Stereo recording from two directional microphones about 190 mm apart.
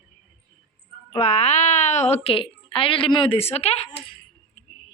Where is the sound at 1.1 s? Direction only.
35° left (ahead or behind).